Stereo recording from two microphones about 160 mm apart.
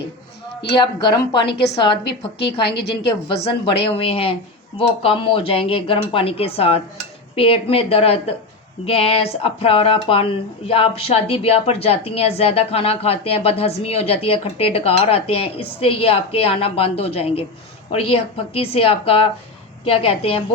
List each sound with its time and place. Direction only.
0.7 s a woman's voice: 30° left (ahead or behind)
2.4 s a woman's voice: 90° left
3.9 s speech: 35° left (ahead or behind)